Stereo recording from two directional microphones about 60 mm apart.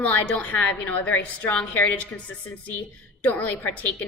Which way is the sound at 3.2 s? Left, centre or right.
Left.